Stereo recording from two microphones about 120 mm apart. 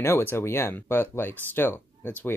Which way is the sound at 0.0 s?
20° left (ahead or behind).